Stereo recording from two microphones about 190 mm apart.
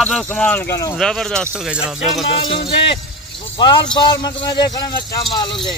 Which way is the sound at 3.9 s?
20° left (ahead or behind).